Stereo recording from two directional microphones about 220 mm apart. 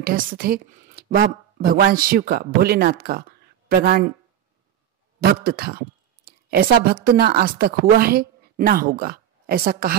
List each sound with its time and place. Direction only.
0.0 s speech: 40° right (ahead or behind)
5.2 s speech: 45° right (ahead or behind)